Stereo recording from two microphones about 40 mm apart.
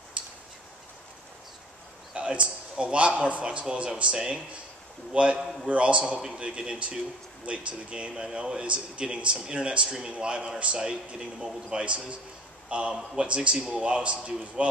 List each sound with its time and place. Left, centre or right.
0.2 s tick-tock: right
2.1 s a man's voice: right
5.4 s a man's voice: centre
5.7 s a man's voice: right